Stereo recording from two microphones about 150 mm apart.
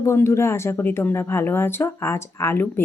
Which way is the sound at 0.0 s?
15° left (ahead or behind).